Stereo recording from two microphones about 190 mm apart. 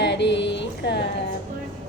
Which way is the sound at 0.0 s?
65° left (ahead or behind).